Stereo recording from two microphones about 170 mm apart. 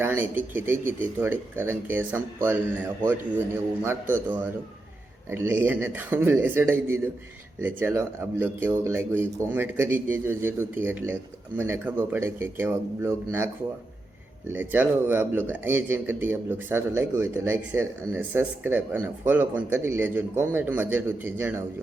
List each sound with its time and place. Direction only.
0.0 s speech: 10° right (ahead or behind)
5.3 s speech: 10° right (ahead or behind)
14.5 s speech: 10° right (ahead or behind)